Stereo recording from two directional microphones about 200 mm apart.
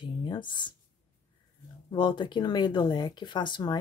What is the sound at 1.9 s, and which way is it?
Speech, 25° left (ahead or behind).